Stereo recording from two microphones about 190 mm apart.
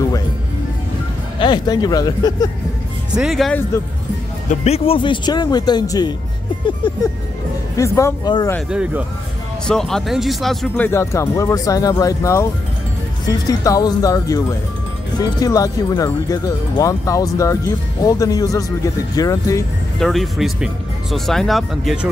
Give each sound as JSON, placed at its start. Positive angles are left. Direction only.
{"t": 1.4, "sound": "speech", "side_deg": 20}
{"t": 3.1, "sound": "speech", "side_deg": 0}
{"t": 4.5, "sound": "speech", "side_deg": 35}
{"t": 7.7, "sound": "speech", "side_deg": 15}
{"t": 8.6, "sound": "speech", "side_deg": -5}
{"t": 10.9, "sound": "speech", "side_deg": 15}
{"t": 15.4, "sound": "speech", "side_deg": 20}
{"t": 20.0, "sound": "speech", "side_deg": 0}